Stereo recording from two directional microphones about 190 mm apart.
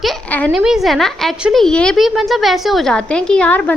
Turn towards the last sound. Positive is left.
turn(degrees=5)  # may be behind; listen again after turning